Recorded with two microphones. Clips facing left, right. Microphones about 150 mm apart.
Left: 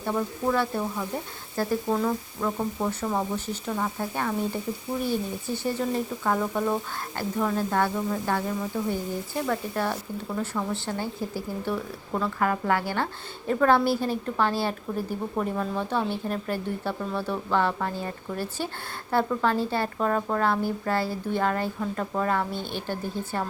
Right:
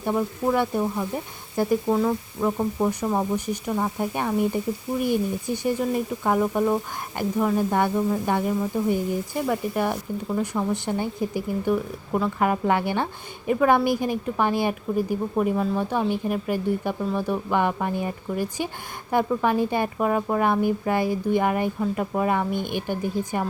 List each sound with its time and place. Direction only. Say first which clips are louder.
0.0 s speech: right 3 dB; 15° right (ahead or behind)